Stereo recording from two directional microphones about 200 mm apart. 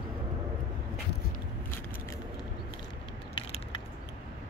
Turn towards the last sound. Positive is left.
turn(degrees=25)  # may be behind; listen again after turning